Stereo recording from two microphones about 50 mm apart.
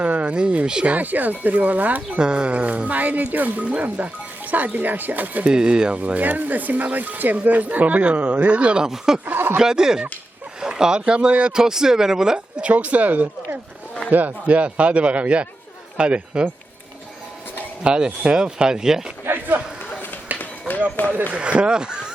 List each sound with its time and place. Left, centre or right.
0.0 s a sound: right
0.3 s speech: right
0.9 s speech: right
2.0 s speech: centre
5.5 s speech: centre
9.2 s speech: right
9.6 s speech: centre
11.5 s speech: centre
12.7 s speech: right
17.8 s speech: centre
19.2 s a sound: right
20.4 s run: left
21.3 s speech: right